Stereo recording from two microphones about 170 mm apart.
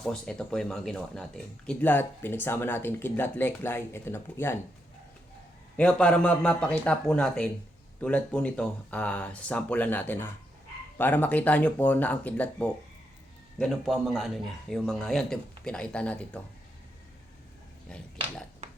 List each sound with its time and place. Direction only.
0.0 s speech: 5° left (ahead or behind)
5.7 s speech: 5° left (ahead or behind)
18.6 s a sound: 40° right (ahead or behind)